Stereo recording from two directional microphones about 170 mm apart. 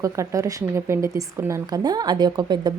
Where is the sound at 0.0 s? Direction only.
20° right (ahead or behind).